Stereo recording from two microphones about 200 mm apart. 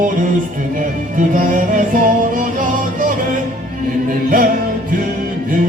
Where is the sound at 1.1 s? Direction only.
40° right (ahead or behind).